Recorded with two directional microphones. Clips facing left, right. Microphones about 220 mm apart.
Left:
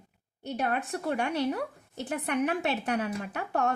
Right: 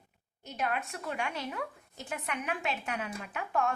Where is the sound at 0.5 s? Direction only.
35° left (ahead or behind).